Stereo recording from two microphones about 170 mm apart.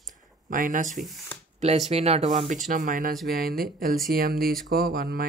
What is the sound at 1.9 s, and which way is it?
Speech, 40° right (ahead or behind).